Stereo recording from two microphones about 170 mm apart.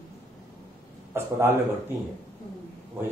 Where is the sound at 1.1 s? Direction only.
15° right (ahead or behind).